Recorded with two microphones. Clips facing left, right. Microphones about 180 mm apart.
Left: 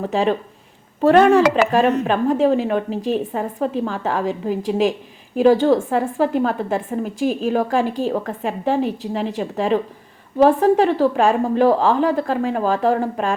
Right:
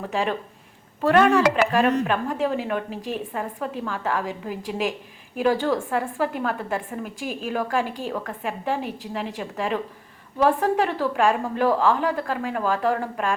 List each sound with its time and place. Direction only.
0.0 s a woman's voice: 25° left (ahead or behind)
1.7 s a woman's voice: 30° left (ahead or behind)